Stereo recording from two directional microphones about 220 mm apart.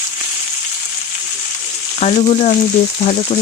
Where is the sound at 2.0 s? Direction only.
30° left (ahead or behind).